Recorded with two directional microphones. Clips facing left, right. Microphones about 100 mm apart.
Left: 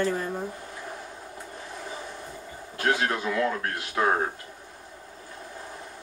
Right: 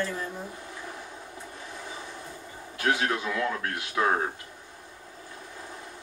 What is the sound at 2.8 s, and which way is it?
Speech, 30° left (ahead or behind).